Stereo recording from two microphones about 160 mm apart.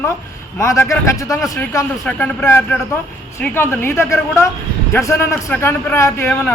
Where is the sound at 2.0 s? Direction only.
10° left (ahead or behind).